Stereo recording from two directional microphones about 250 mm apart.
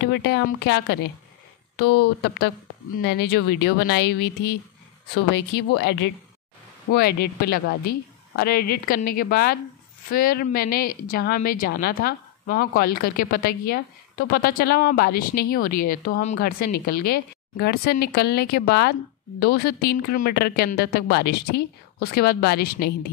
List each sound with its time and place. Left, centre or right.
0.0 s a woman's voice: left